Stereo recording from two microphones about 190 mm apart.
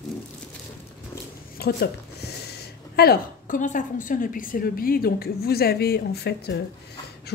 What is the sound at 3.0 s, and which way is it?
A woman's voice, 50° left (ahead or behind).